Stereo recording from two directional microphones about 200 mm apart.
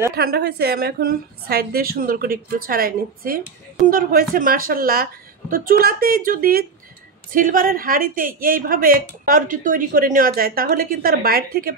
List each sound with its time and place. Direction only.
0.1 s a woman's voice: 50° right (ahead or behind)